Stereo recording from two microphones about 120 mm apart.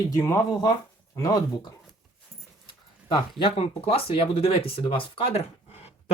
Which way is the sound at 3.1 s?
45° left (ahead or behind).